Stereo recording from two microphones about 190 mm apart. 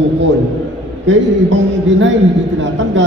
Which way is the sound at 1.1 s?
75° right (ahead or behind).